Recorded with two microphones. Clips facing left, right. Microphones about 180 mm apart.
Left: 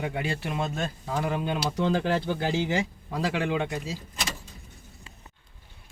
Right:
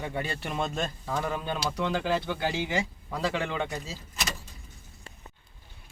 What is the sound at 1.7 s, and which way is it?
Speech, 30° left (ahead or behind).